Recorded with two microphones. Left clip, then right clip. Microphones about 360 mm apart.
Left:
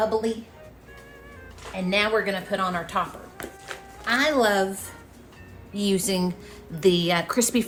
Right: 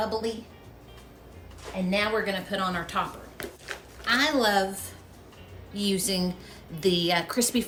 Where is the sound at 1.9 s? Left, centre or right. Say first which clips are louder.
Left 4 dB; centre.